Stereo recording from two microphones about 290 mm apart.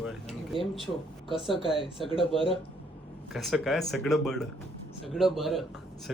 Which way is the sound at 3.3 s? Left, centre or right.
Centre.